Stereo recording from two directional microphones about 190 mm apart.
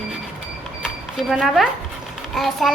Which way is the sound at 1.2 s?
Centre (ahead or behind).